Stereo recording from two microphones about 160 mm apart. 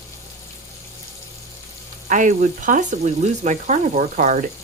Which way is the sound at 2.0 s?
50° right (ahead or behind).